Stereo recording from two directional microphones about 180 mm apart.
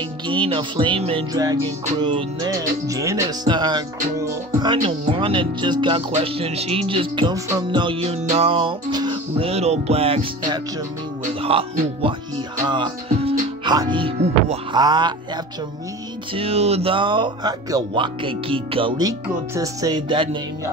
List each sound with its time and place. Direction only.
0.3 s speech: 30° right (ahead or behind)
1.3 s speech: 20° right (ahead or behind)
16.3 s speech: 35° right (ahead or behind)